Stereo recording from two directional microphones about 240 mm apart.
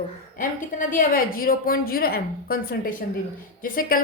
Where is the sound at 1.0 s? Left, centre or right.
Left.